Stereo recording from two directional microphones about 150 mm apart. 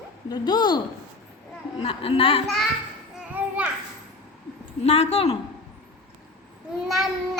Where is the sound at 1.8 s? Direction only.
40° left (ahead or behind).